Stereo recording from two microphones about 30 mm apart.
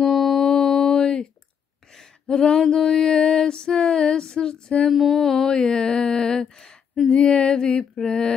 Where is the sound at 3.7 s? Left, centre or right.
Left.